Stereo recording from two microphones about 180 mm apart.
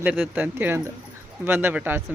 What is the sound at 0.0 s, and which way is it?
Speech, 10° right (ahead or behind).